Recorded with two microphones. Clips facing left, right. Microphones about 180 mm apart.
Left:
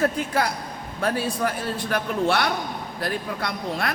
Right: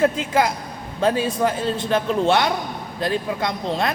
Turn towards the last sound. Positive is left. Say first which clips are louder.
# right 4 dB
turn(degrees=-25)  # may be behind; listen again after turning